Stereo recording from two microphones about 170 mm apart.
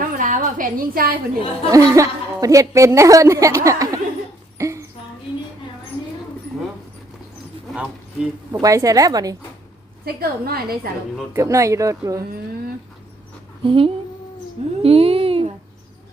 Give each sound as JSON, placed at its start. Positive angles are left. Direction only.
{"t": 0.2, "sound": "a woman's voice", "side_deg": -50}
{"t": 1.7, "sound": "a woman's voice", "side_deg": -20}
{"t": 4.5, "sound": "rodents", "side_deg": -20}
{"t": 7.7, "sound": "a sound", "side_deg": -5}
{"t": 8.5, "sound": "a woman's voice", "side_deg": -20}
{"t": 10.1, "sound": "a woman's voice", "side_deg": -65}
{"t": 11.3, "sound": "a woman's voice", "side_deg": -20}
{"t": 13.7, "sound": "a child's voice", "side_deg": -30}